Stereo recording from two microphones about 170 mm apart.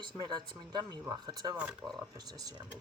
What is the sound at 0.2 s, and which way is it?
Speech, 25° right (ahead or behind).